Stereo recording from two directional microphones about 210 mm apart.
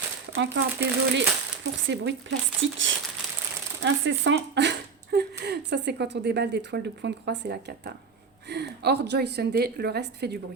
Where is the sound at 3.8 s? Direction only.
60° right (ahead or behind).